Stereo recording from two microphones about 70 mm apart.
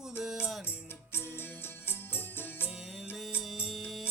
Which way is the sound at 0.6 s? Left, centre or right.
Left.